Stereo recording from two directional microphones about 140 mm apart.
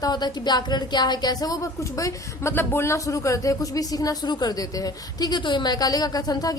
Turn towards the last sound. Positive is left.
turn(degrees=25)  # may be behind; listen again after turning